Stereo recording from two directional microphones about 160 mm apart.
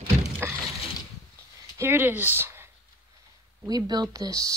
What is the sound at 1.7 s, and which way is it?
Speech, 15° right (ahead or behind).